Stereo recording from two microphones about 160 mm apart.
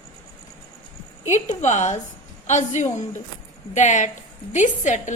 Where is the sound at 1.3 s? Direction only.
45° left (ahead or behind).